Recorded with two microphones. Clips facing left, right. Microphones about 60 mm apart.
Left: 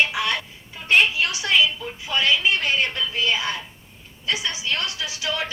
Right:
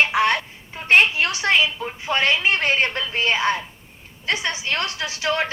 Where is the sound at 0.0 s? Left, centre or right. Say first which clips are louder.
Right 4 dB; right.